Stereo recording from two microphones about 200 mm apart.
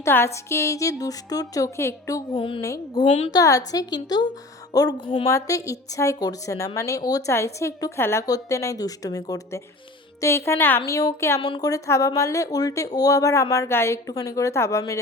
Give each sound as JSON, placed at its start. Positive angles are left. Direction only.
{"t": 0.0, "sound": "a woman's voice", "side_deg": 10}
{"t": 3.1, "sound": "a woman's voice", "side_deg": 30}
{"t": 3.3, "sound": "a woman's voice", "side_deg": 15}
{"t": 11.3, "sound": "a woman's voice", "side_deg": 25}